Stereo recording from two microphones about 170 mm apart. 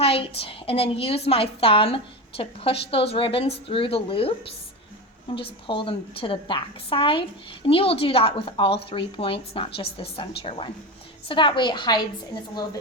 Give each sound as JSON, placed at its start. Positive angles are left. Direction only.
{"t": 0.0, "sound": "a woman's voice", "side_deg": 35}